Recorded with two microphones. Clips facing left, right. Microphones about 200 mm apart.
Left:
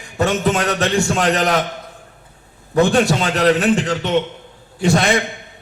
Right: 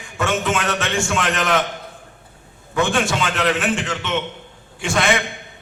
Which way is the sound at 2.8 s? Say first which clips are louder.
Left 5 dB; 35° left (ahead or behind).